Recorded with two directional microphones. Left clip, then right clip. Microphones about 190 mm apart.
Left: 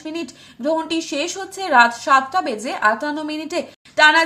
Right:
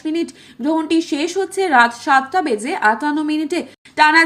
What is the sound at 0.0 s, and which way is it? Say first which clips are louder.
A woman's voice: right 7 dB; 15° right (ahead or behind).